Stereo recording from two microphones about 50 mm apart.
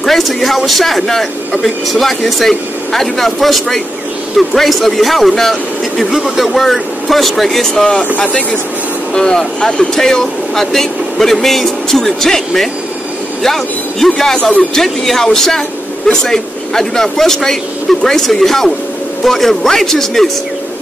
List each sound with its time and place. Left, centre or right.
0.0 s a man's voice: centre
8.3 s speech: left
9.1 s speech: centre